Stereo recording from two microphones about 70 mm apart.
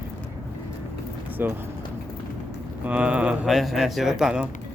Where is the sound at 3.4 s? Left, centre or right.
Centre.